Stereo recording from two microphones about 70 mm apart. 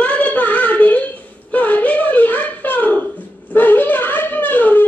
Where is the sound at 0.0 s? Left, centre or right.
Centre.